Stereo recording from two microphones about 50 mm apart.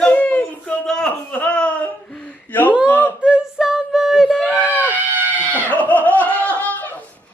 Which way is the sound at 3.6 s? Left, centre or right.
Centre.